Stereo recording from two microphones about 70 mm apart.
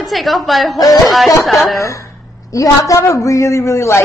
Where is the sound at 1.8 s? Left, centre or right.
Left.